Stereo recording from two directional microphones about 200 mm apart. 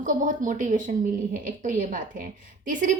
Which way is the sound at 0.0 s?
40° right (ahead or behind).